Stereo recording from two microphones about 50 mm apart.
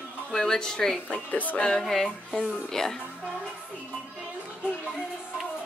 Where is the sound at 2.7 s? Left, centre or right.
Centre.